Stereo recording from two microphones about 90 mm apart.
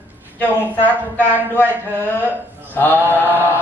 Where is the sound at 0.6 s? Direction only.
20° left (ahead or behind).